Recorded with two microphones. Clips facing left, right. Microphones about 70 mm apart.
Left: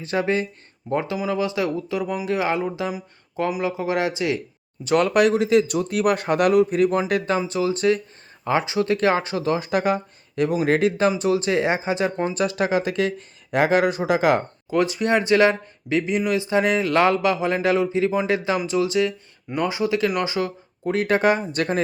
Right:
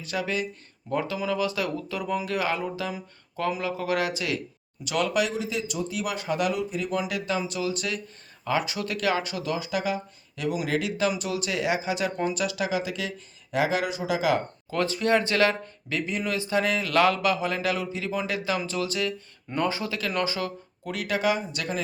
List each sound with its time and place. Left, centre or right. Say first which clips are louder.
0.0 s speech: left 6 dB; left
4.8 s speech: left 8 dB; left
7.1 s speech: left 7 dB; left
14.7 s speech: left 3 dB; centre
20.9 s speech: left 7 dB; left